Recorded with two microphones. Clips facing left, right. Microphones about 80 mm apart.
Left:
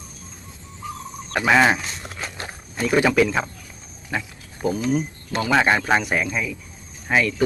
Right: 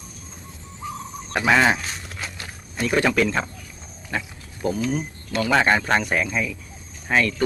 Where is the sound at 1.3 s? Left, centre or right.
Centre.